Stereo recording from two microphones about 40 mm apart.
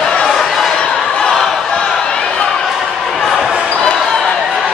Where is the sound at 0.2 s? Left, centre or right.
Centre.